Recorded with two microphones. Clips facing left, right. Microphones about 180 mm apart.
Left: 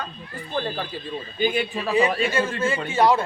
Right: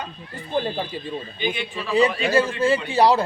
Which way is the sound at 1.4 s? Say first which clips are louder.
Left 6 dB; 40° left (ahead or behind).